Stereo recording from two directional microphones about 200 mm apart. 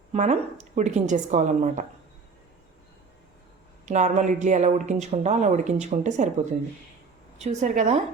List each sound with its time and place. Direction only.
0.1 s speech: 35° right (ahead or behind)
3.8 s speech: 35° right (ahead or behind)
7.3 s speech: 35° right (ahead or behind)